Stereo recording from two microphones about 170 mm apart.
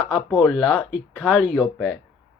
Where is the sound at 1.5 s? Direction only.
10° left (ahead or behind).